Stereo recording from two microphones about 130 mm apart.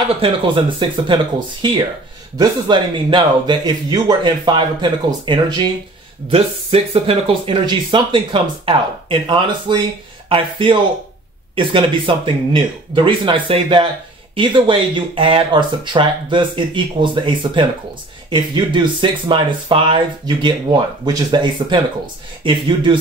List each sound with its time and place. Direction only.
0.2 s speech: 40° right (ahead or behind)
6.3 s speech: 50° right (ahead or behind)